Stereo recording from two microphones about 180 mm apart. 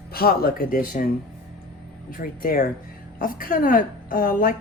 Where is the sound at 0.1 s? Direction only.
55° left (ahead or behind).